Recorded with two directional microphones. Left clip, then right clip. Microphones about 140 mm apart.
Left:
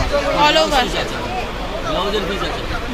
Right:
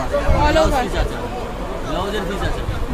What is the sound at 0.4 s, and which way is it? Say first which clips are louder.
Speech: left 3 dB; 15° right (ahead or behind).